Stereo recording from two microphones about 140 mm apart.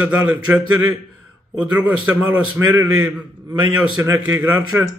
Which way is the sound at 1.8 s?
10° right (ahead or behind).